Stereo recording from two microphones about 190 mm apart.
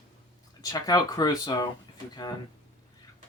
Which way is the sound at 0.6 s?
20° left (ahead or behind).